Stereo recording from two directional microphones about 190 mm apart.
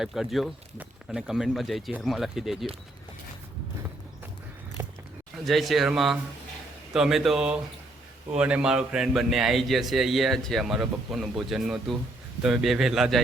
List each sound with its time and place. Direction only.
0.0 s a man's voice: centre (ahead or behind)
4.8 s biting: 15° right (ahead or behind)
5.5 s a man's voice: centre (ahead or behind)